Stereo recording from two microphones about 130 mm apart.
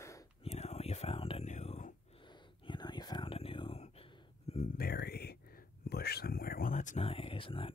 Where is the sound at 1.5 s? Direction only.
60° left (ahead or behind).